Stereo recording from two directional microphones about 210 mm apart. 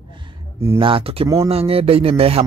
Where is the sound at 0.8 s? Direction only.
25° right (ahead or behind).